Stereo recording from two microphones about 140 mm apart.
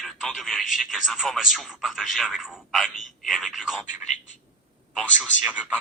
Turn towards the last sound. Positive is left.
turn(degrees=-10)  # may be behind; listen again after turning